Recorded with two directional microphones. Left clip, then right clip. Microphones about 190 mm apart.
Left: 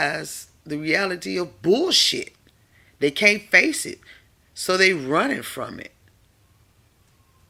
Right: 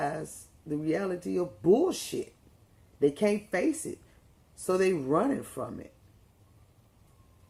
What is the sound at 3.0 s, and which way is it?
Speech, 20° left (ahead or behind).